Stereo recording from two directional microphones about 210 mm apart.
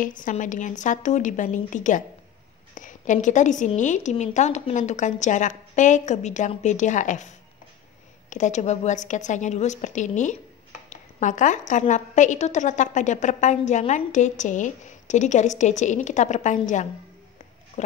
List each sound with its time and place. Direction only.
0.0 s a woman's voice: 40° left (ahead or behind)